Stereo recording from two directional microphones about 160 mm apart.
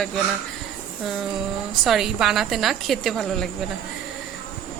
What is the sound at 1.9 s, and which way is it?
A woman's voice, centre (ahead or behind).